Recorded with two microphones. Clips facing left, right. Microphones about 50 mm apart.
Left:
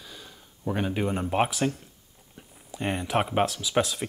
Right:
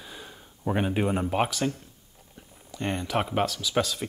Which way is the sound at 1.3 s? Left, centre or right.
Centre.